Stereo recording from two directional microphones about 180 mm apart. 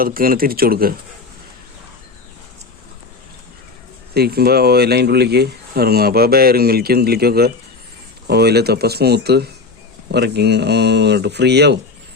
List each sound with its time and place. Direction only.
0.0 s speech: 55° right (ahead or behind)
4.1 s speech: 60° right (ahead or behind)